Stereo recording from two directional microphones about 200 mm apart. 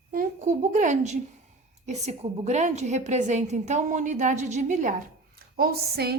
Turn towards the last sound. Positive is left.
turn(degrees=-50)  # may be behind; listen again after turning